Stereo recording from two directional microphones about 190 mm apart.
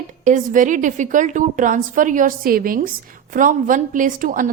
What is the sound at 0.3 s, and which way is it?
A woman's voice, 40° right (ahead or behind).